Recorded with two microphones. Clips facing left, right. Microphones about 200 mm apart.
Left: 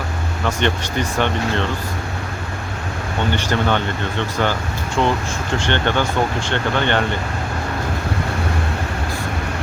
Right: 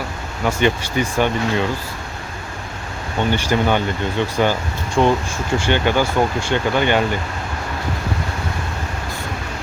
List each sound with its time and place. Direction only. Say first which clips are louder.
0.4 s speech: right 3 dB; 10° right (ahead or behind)
3.3 s speech: right 2 dB; 10° right (ahead or behind)